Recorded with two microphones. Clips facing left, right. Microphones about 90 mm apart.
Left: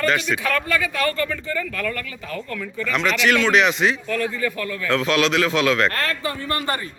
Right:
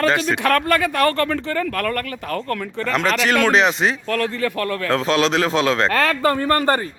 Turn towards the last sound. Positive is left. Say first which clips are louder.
# right 7 dB
turn(degrees=-35)  # may be behind; listen again after turning